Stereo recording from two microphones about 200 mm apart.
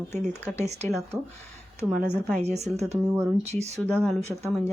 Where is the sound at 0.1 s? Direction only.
10° left (ahead or behind).